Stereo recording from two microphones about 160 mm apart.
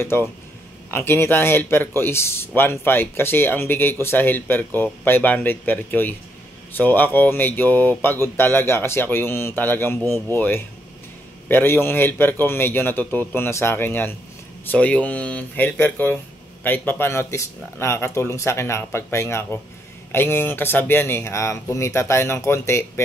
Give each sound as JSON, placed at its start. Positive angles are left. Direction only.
{"t": 0.0, "sound": "a man's voice", "side_deg": 15}